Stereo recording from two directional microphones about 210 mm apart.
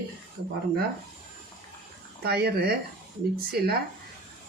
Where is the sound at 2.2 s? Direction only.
50° right (ahead or behind).